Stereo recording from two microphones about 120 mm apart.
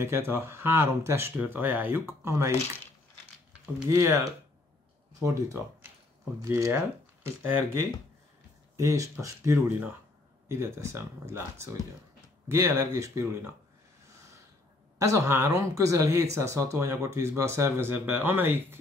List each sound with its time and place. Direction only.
0.0 s speech: 20° right (ahead or behind)
3.9 s speech: 25° right (ahead or behind)
5.2 s speech: 25° right (ahead or behind)
15.0 s speech: 25° right (ahead or behind)